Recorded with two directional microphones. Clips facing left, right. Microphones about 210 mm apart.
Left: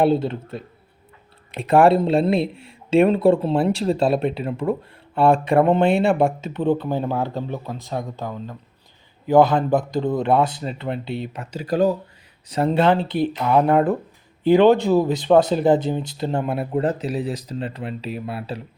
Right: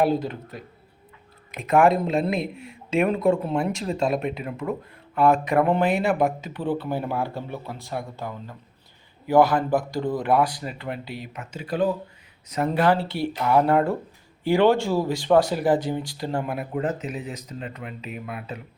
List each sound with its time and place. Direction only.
0.0 s speech: 25° left (ahead or behind)
12.5 s speech: 30° left (ahead or behind)